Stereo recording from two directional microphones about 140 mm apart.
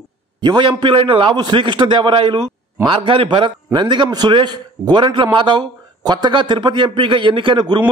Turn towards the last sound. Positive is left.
turn(degrees=-35)  # may be behind; listen again after turning